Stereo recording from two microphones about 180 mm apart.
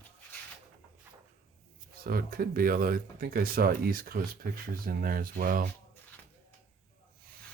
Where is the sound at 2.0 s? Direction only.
55° right (ahead or behind).